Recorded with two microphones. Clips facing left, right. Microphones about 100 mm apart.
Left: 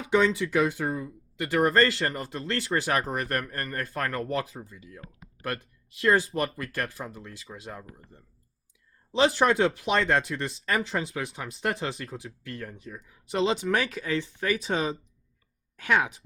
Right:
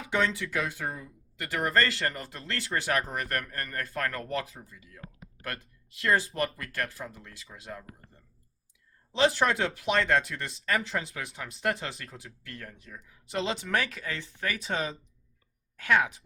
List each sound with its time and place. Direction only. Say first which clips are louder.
0.3 s speech: left 7 dB; 35° left (ahead or behind)
6.0 s speech: left 3 dB; 30° left (ahead or behind)
9.1 s speech: left 3 dB; 30° left (ahead or behind)
14.6 s speech: left 4 dB; 30° left (ahead or behind)
15.8 s speech: even; 20° left (ahead or behind)